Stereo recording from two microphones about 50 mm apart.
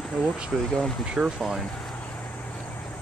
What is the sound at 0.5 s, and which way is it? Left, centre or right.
Speech, centre.